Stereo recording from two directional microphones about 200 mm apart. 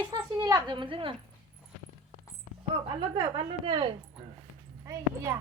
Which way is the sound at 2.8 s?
25° right (ahead or behind).